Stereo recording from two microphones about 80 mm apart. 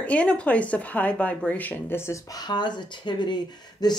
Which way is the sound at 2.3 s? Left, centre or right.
Left.